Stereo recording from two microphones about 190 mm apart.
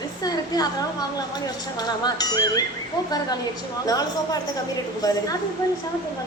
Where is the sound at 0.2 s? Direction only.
20° left (ahead or behind).